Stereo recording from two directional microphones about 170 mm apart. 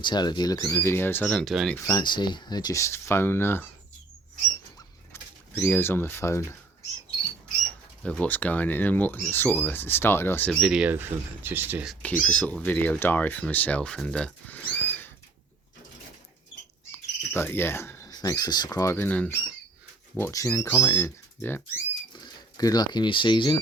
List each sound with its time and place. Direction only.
0.0 s speech: 25° left (ahead or behind); by 1.7 s centre (ahead or behind)
1.9 s speech: 25° left (ahead or behind)
5.1 s speech: 10° left (ahead or behind)
8.0 s speech: 5° left (ahead or behind)
10.6 s speech: 5° right (ahead or behind)
12.2 s speech: 10° left (ahead or behind)
16.9 s speech: 15° left (ahead or behind)
22.1 s speech: 25° left (ahead or behind)